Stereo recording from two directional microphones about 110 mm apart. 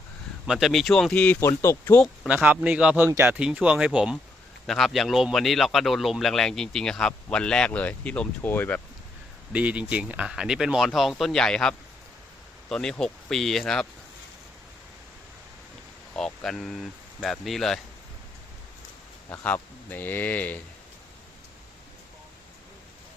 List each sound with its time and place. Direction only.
0.4 s speech: 5° right (ahead or behind)
1.4 s speech: 25° left (ahead or behind)
2.2 s speech: 15° right (ahead or behind); by 8.8 s 20° left (ahead or behind)
9.5 s speech: 10° right (ahead or behind); by 13.8 s 5° left (ahead or behind)
16.1 s speech: 5° left (ahead or behind)
19.3 s speech: 15° left (ahead or behind)